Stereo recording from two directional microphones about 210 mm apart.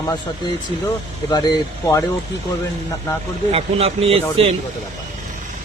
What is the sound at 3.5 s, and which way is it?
Speech, 30° right (ahead or behind).